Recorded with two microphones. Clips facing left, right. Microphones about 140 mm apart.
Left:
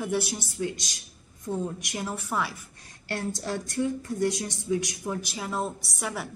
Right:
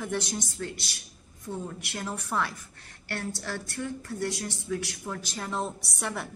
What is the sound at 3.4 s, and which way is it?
A woman's voice, 20° left (ahead or behind).